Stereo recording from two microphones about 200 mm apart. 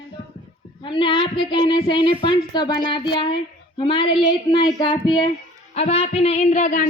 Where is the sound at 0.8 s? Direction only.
25° left (ahead or behind).